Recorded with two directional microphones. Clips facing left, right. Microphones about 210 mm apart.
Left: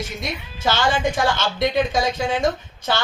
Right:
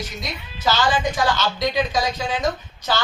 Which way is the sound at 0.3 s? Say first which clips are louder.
Even; 25° left (ahead or behind).